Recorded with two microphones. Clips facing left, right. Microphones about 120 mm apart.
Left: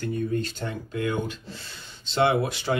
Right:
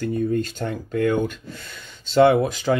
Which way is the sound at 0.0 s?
40° right (ahead or behind).